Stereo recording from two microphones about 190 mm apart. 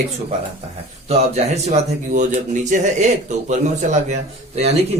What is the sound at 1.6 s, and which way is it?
Speech, 40° right (ahead or behind).